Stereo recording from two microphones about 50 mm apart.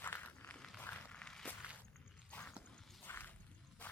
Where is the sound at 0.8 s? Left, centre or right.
Left.